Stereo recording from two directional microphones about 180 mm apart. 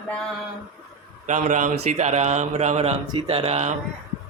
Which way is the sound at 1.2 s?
40° right (ahead or behind).